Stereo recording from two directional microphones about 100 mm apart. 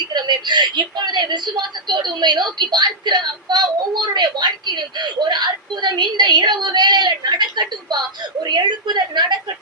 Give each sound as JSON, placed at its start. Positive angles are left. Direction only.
{"t": 0.1, "sound": "speech", "side_deg": -50}